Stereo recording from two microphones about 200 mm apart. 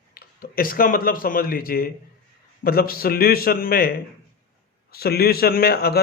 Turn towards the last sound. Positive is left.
turn(degrees=50)  # may be behind; listen again after turning